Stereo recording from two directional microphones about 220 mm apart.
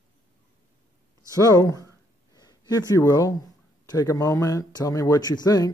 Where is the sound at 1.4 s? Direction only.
15° left (ahead or behind).